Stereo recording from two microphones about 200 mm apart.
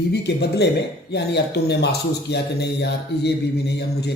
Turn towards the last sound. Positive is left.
turn(degrees=55)  # may be behind; listen again after turning